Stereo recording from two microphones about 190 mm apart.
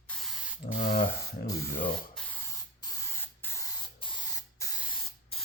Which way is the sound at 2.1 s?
10° left (ahead or behind).